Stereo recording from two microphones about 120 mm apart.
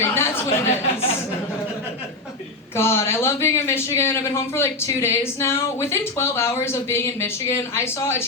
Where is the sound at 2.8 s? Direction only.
20° left (ahead or behind).